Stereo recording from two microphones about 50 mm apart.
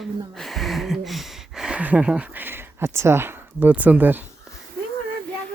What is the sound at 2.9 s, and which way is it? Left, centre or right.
Speech, right.